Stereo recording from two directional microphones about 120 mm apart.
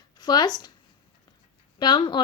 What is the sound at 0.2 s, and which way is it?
Speech, 35° left (ahead or behind).